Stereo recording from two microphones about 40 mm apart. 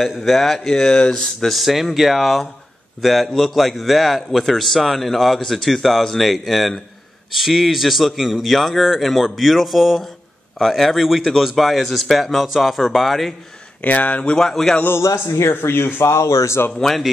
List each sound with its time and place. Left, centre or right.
0.2 s a man's voice: centre
1.0 s speech: centre
1.5 s a man's voice: centre
13.7 s speech: left
14.3 s speech: centre
14.9 s a man's voice: left
16.6 s speech: left